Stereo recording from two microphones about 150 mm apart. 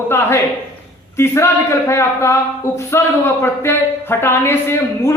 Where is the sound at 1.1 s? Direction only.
15° left (ahead or behind).